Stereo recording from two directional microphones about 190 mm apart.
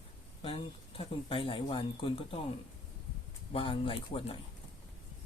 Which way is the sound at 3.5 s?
30° left (ahead or behind).